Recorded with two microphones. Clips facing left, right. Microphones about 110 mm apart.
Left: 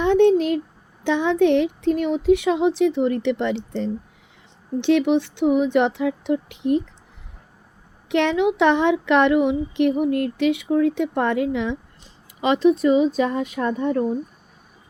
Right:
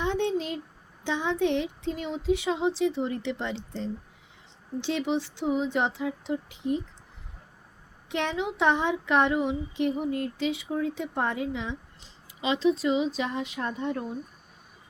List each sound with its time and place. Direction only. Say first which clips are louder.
0.0 s a sound: left 12 dB; 65° left (ahead or behind)
1.0 s speech: left 9 dB; 65° left (ahead or behind)
8.1 s speech: left 10 dB; 75° left (ahead or behind)
12.4 s speech: left 8 dB; 55° left (ahead or behind)